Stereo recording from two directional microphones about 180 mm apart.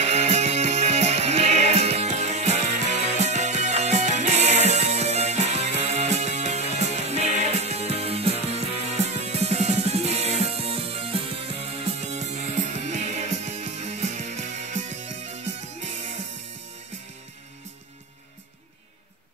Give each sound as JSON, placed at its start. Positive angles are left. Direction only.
{"t": 0.1, "sound": "music", "side_deg": -40}